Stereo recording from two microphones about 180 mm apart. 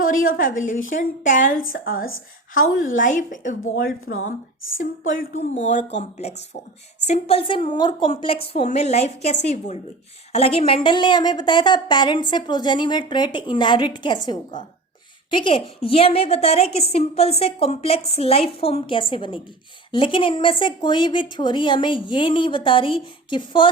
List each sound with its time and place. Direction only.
0.0 s a woman's voice: 50° left (ahead or behind)
4.1 s speech: 90° left
5.1 s a woman's voice: 45° left (ahead or behind); by 14.2 s 25° left (ahead or behind)
15.3 s a woman's voice: 30° left (ahead or behind)